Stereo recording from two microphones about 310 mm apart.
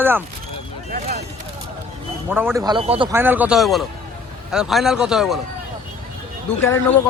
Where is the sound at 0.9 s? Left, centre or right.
Right.